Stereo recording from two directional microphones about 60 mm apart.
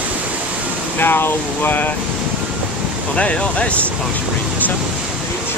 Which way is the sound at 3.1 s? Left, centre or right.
Centre.